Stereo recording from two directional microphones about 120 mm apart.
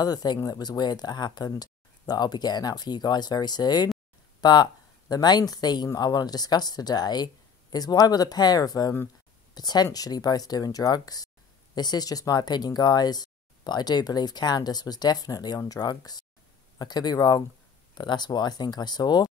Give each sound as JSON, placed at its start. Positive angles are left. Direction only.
{"t": 0.0, "sound": "speech", "side_deg": 35}